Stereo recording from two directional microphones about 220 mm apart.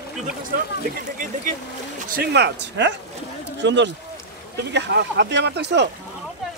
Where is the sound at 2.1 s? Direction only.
50° right (ahead or behind).